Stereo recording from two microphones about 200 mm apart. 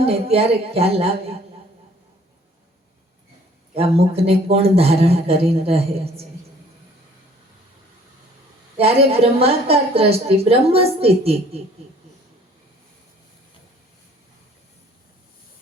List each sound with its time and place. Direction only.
0.0 s a woman's voice: 30° right (ahead or behind)
3.8 s a woman's voice: 30° right (ahead or behind)
8.8 s a woman's voice: 30° right (ahead or behind)